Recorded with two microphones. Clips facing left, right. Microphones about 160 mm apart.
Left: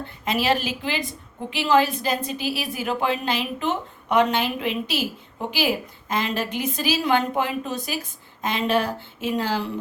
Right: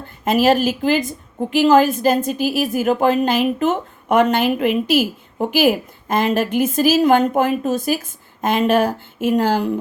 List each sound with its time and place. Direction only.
0.3 s a woman's voice: 45° right (ahead or behind)